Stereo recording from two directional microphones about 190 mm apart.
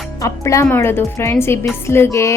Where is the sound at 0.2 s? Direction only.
15° left (ahead or behind).